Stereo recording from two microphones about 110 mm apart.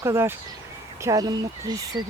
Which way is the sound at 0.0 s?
25° right (ahead or behind).